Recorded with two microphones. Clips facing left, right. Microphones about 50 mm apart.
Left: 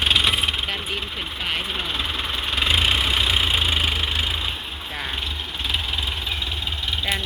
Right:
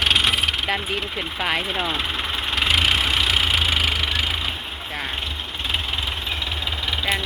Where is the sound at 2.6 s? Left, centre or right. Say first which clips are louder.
Right 1 dB; right.